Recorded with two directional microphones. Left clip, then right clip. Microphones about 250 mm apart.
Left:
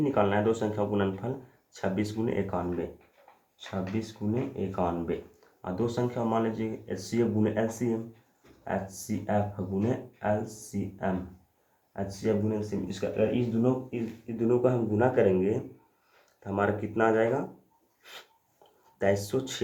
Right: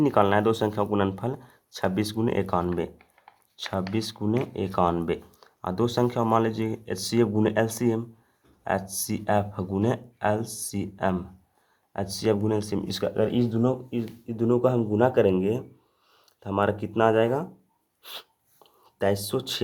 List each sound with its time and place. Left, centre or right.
0.0 s speech: right
18.9 s speech: right